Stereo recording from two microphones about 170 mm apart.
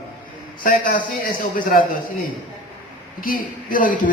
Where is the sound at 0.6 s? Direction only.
55° left (ahead or behind).